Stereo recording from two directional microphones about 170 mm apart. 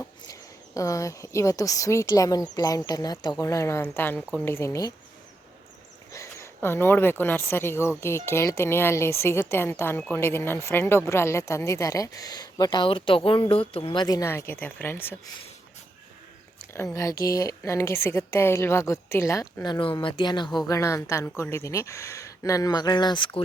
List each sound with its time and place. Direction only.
0.3 s speech: 20° left (ahead or behind)
6.1 s speech: 15° left (ahead or behind)
16.7 s speech: 15° left (ahead or behind)